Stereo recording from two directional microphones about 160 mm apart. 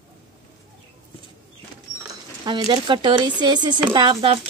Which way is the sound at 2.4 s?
25° right (ahead or behind).